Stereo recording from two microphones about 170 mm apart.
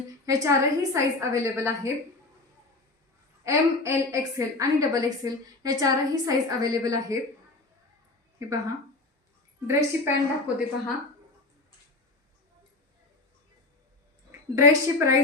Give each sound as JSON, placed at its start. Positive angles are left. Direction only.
{"t": 0.3, "sound": "a woman's voice", "side_deg": -20}
{"t": 3.4, "sound": "a woman's voice", "side_deg": -20}
{"t": 8.4, "sound": "a woman's voice", "side_deg": -20}
{"t": 14.5, "sound": "a woman's voice", "side_deg": -15}